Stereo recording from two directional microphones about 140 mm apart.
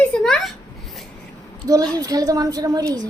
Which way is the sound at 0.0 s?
5° left (ahead or behind).